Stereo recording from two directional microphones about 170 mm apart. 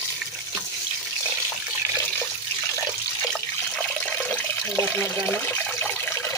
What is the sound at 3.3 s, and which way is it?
Water, 10° left (ahead or behind).